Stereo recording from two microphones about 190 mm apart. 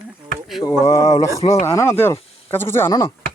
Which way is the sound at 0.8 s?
15° left (ahead or behind).